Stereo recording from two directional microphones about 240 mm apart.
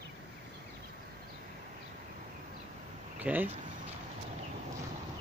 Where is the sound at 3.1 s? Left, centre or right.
Centre.